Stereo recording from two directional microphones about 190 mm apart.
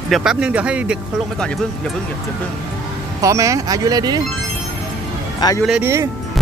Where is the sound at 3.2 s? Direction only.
15° right (ahead or behind).